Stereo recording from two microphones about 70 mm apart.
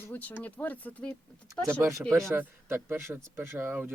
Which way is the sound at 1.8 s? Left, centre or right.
Right.